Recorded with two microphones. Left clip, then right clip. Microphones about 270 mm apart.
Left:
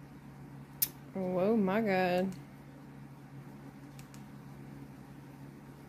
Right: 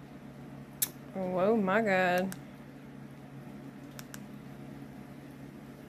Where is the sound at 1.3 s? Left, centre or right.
Centre.